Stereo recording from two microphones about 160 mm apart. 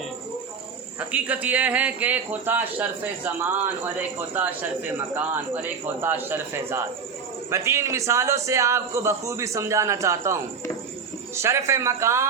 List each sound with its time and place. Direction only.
0.9 s a man's voice: 10° right (ahead or behind)